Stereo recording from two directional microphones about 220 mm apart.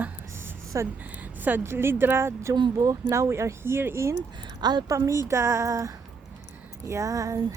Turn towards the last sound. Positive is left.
turn(degrees=-15)  # may be behind; listen again after turning